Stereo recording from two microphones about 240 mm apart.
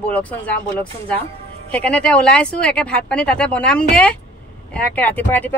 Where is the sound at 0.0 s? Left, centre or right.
Centre.